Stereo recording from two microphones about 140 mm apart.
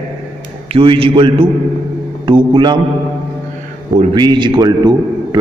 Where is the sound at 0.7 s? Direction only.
40° right (ahead or behind).